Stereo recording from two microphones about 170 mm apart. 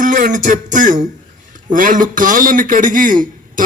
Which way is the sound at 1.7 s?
50° right (ahead or behind).